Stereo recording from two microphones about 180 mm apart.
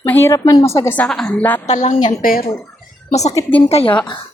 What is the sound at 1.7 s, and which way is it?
Speech, 40° left (ahead or behind).